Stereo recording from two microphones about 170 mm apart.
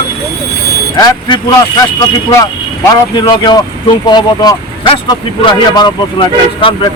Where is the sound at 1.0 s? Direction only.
25° left (ahead or behind).